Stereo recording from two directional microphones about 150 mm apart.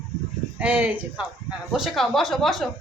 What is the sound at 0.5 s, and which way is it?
A woman's voice, 10° right (ahead or behind).